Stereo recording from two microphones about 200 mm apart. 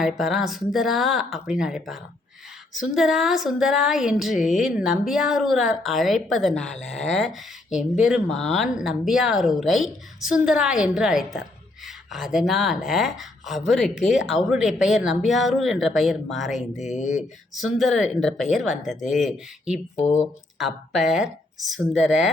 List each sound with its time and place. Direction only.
0.0 s speech: centre (ahead or behind)
16.7 s speech: 35° left (ahead or behind)
17.5 s speech: centre (ahead or behind)